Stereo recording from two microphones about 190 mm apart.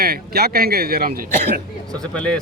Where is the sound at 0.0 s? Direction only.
55° right (ahead or behind).